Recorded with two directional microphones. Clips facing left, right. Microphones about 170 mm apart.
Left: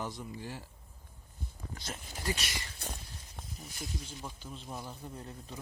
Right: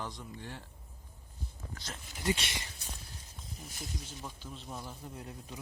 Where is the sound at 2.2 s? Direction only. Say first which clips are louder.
Right 4 dB; 25° right (ahead or behind).